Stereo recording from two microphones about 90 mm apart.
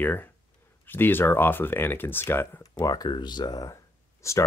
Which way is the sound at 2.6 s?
45° left (ahead or behind).